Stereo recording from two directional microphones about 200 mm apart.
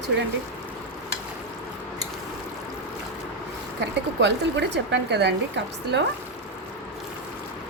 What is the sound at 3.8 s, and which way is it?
Speech, 60° right (ahead or behind).